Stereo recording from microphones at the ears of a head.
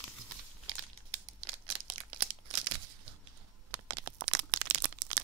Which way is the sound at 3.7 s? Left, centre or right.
Right.